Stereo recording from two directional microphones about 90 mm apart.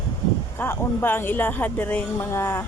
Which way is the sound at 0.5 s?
25° left (ahead or behind).